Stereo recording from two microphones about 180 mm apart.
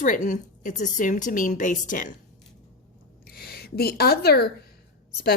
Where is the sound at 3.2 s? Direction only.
60° left (ahead or behind).